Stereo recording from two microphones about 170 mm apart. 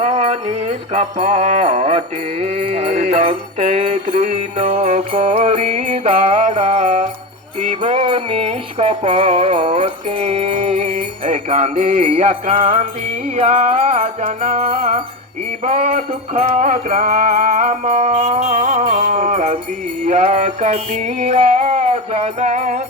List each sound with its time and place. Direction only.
0.0 s music: 40° right (ahead or behind)
14.8 s music: 50° right (ahead or behind)
15.6 s music: 40° right (ahead or behind)